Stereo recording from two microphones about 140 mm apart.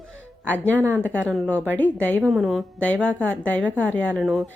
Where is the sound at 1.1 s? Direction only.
Centre (ahead or behind).